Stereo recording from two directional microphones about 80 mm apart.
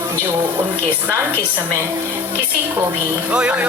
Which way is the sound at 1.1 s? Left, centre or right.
Right.